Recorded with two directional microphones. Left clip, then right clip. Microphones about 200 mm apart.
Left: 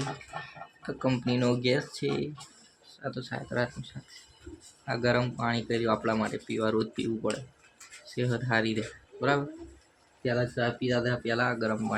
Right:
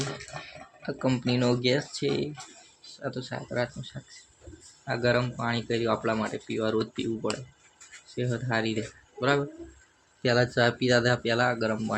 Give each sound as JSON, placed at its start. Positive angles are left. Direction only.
{"t": 0.8, "sound": "speech", "side_deg": -10}
{"t": 4.9, "sound": "speech", "side_deg": -5}
{"t": 10.2, "sound": "speech", "side_deg": -25}